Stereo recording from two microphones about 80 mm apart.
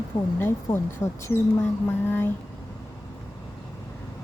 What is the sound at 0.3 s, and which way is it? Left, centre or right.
Speech, left.